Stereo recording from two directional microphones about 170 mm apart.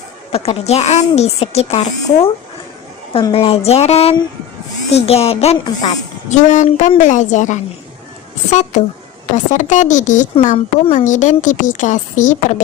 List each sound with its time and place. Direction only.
0.3 s speech: 35° left (ahead or behind)
5.6 s speech: 25° left (ahead or behind)
6.3 s a woman's voice: 45° left (ahead or behind)